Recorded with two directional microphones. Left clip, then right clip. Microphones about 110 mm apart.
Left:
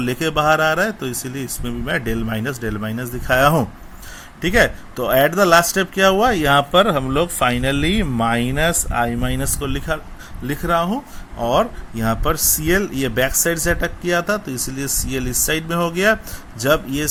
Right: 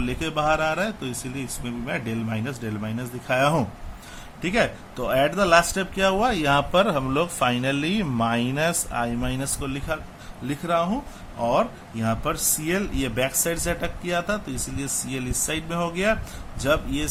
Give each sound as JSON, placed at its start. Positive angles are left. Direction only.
{"t": 0.0, "sound": "speech", "side_deg": 55}